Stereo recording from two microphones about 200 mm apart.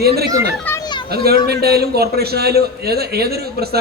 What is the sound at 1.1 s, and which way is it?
A man's voice, 50° right (ahead or behind).